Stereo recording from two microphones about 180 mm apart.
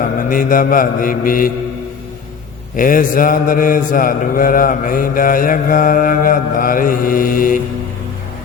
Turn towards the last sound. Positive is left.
turn(degrees=50)  # may be behind; listen again after turning